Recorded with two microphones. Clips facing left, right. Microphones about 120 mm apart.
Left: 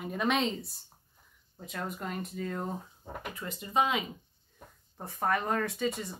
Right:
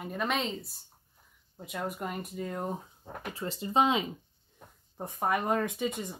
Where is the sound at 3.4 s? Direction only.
30° right (ahead or behind).